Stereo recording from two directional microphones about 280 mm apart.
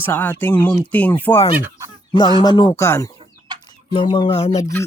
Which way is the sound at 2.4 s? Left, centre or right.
Centre.